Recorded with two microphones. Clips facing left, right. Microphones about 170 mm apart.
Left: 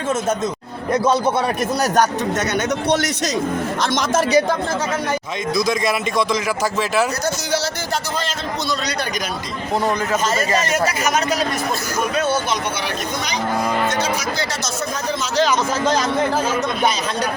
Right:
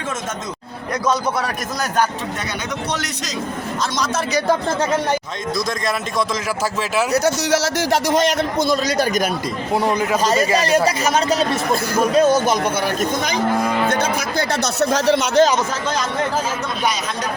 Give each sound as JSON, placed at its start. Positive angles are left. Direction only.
{"t": 1.0, "sound": "a man's voice", "side_deg": 30}
{"t": 5.5, "sound": "a man's voice", "side_deg": 0}
{"t": 7.1, "sound": "speech", "side_deg": -90}
{"t": 8.7, "sound": "speech", "side_deg": -45}
{"t": 9.7, "sound": "a man's voice", "side_deg": -10}
{"t": 10.6, "sound": "speech", "side_deg": -35}
{"t": 13.8, "sound": "speech", "side_deg": -55}